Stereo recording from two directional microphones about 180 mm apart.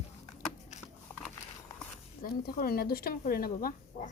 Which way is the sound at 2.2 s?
55° left (ahead or behind).